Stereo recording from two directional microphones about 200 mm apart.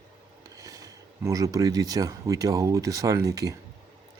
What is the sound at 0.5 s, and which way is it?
Speech, 15° right (ahead or behind).